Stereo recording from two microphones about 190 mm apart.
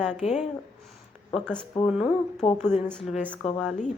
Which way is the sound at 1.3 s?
5° left (ahead or behind).